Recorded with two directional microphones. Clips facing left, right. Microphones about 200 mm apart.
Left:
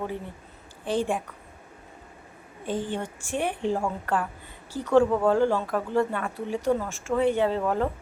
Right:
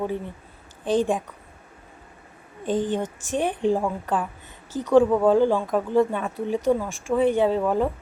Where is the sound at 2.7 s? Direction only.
20° right (ahead or behind).